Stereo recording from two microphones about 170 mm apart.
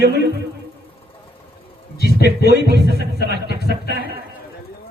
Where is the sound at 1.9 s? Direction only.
70° left (ahead or behind).